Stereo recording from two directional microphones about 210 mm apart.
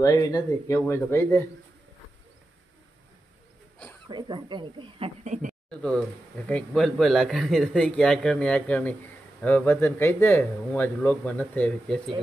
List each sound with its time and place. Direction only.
0.0 s speech: 15° left (ahead or behind)
4.1 s speech: 20° right (ahead or behind); by 5.6 s 35° right (ahead or behind)
5.7 s speech: 5° left (ahead or behind)